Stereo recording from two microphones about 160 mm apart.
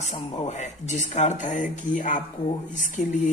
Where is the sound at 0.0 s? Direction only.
40° left (ahead or behind).